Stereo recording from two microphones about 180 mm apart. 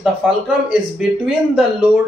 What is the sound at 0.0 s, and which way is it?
Speech, 5° right (ahead or behind).